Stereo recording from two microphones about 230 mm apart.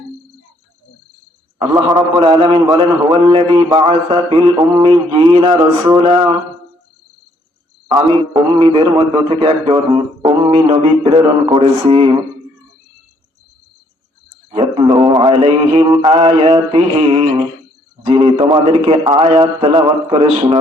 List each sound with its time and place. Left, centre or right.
1.5 s a man's voice: centre
7.9 s a man's voice: centre
14.5 s a man's voice: right